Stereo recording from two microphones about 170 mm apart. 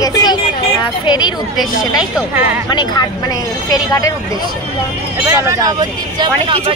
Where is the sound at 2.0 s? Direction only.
10° right (ahead or behind).